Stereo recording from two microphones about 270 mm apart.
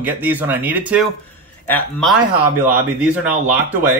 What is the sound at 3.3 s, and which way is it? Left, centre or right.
Speech, centre.